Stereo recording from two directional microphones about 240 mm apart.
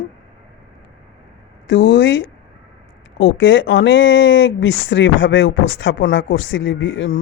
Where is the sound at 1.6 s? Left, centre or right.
Left.